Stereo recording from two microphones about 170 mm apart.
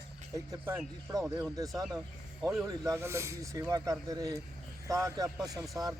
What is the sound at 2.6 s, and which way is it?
Speech, 20° right (ahead or behind).